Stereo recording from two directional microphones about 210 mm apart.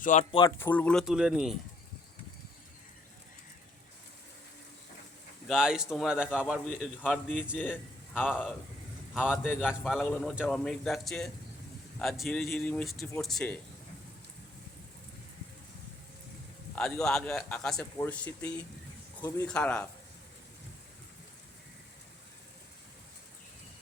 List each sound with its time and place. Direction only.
0.0 s speech: 35° left (ahead or behind)
0.3 s a man's voice: 15° left (ahead or behind); by 1.5 s 5° right (ahead or behind)
5.5 s a man's voice: 5° right (ahead or behind)
9.6 s a man's voice: centre (ahead or behind)
16.7 s a man's voice: centre (ahead or behind)